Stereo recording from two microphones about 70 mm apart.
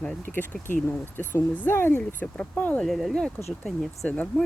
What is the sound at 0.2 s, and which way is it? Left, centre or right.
Speech, left.